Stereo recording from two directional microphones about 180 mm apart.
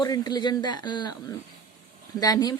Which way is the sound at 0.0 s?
20° left (ahead or behind).